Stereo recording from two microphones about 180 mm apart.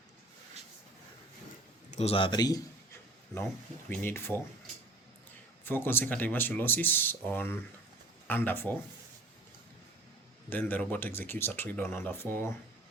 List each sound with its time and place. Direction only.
1.9 s a sound: 35° left (ahead or behind); by 3.4 s 15° left (ahead or behind)
3.8 s speech: 10° left (ahead or behind)
5.6 s speech: 10° left (ahead or behind)
10.5 s speech: 10° left (ahead or behind)